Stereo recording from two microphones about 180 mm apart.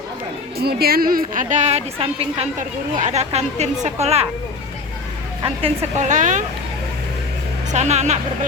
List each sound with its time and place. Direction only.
0.6 s a woman's voice: 60° right (ahead or behind); by 2.5 s 30° right (ahead or behind)
2.6 s speech: 45° right (ahead or behind)
6.0 s a woman's voice: 45° right (ahead or behind)
7.7 s speech: 40° right (ahead or behind)